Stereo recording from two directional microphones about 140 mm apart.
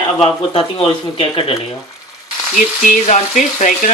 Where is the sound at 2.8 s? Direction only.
60° left (ahead or behind).